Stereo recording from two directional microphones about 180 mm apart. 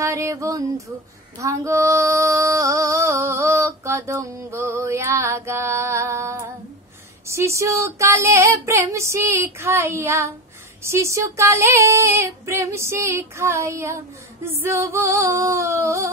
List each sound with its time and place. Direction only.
0.0 s female singing: 15° right (ahead or behind)